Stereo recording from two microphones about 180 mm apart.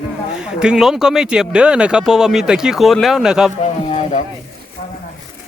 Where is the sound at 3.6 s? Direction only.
40° left (ahead or behind).